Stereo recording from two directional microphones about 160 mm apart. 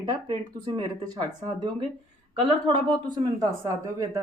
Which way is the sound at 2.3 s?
30° right (ahead or behind).